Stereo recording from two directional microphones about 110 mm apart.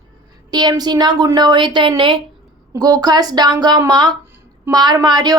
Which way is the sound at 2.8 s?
35° right (ahead or behind).